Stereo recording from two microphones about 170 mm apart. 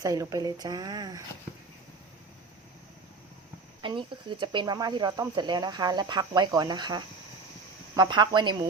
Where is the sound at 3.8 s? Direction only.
30° right (ahead or behind).